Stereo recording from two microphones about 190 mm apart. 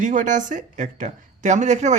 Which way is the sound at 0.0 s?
45° right (ahead or behind).